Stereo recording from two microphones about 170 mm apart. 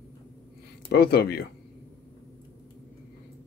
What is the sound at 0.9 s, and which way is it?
Speech, 65° left (ahead or behind).